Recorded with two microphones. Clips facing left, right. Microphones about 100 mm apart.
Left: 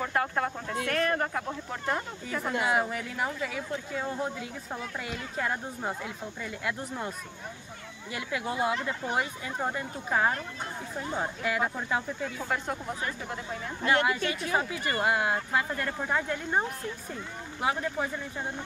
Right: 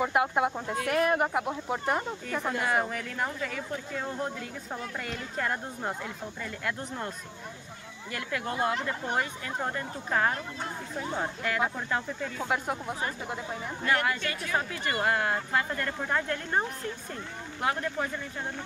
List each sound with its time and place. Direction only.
0.0 s speech: 15° right (ahead or behind)
2.6 s speech: 5° left (ahead or behind)
12.4 s speech: 10° right (ahead or behind)
13.8 s speech: 20° left (ahead or behind)